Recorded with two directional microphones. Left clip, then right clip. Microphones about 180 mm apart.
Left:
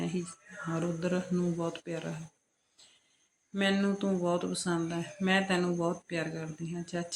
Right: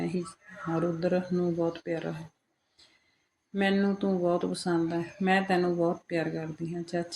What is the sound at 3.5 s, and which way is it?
Speech, 5° left (ahead or behind).